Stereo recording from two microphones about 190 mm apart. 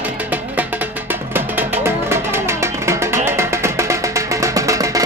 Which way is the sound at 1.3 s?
10° right (ahead or behind).